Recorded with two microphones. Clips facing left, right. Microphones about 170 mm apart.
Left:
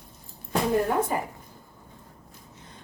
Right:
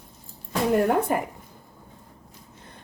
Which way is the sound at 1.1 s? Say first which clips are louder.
Right 4 dB; 60° right (ahead or behind).